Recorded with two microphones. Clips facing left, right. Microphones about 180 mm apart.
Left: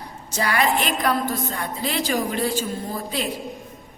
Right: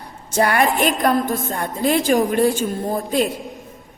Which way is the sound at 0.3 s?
50° right (ahead or behind).